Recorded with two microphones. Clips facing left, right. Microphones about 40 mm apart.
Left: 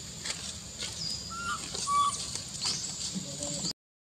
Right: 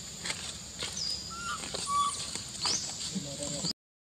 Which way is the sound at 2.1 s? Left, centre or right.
Right.